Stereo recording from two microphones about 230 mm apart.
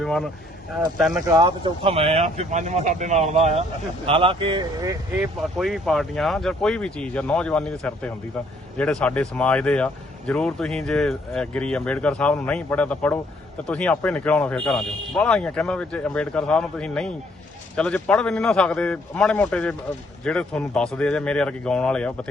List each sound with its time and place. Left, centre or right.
0.0 s speech: centre
1.2 s speech: centre
5.4 s speech: centre